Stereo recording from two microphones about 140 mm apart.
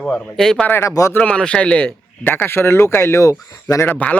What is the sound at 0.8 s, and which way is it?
Speech, 20° left (ahead or behind).